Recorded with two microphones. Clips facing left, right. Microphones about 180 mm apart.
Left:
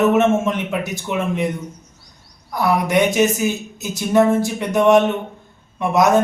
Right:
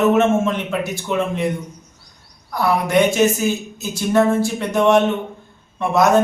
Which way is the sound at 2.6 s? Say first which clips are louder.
Even; 15° left (ahead or behind).